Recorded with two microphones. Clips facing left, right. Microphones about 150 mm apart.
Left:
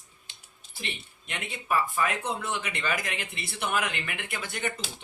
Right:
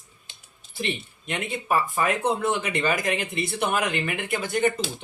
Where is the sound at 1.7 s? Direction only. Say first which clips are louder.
Right 3 dB; 35° right (ahead or behind).